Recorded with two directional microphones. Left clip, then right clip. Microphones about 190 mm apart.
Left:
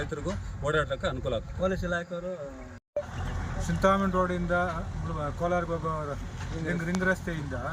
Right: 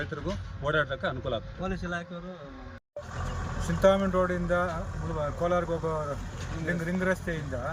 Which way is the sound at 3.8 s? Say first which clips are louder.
Right 2 dB; centre (ahead or behind).